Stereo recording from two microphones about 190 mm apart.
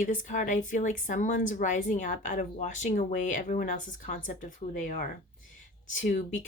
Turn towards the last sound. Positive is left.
turn(degrees=40)  # may be behind; listen again after turning